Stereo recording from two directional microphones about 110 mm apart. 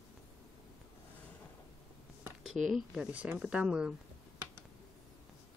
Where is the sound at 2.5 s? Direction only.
Centre (ahead or behind).